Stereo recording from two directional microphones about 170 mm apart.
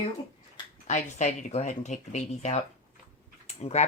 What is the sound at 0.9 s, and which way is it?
Speech, 45° left (ahead or behind).